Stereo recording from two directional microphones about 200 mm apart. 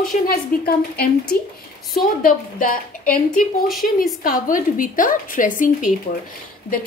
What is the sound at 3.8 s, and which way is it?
A woman's voice, 40° left (ahead or behind).